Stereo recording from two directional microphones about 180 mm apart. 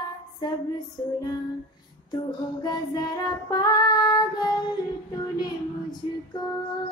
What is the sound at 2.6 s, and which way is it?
Child singing, 20° left (ahead or behind).